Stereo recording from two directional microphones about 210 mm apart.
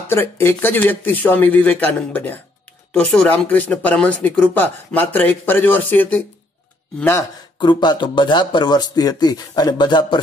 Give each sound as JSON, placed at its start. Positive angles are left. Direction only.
{"t": 0.1, "sound": "speech", "side_deg": 10}